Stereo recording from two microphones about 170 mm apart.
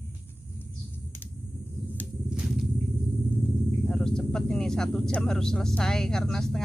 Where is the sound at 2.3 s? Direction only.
Centre (ahead or behind).